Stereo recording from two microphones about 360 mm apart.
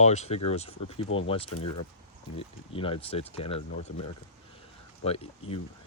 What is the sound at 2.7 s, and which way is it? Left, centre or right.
Speech, centre.